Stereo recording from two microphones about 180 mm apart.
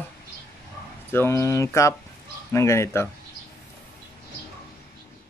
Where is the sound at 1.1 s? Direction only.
15° left (ahead or behind).